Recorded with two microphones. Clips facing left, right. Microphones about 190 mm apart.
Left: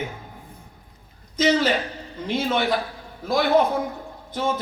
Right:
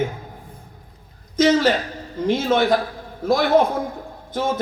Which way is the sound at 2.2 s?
45° right (ahead or behind).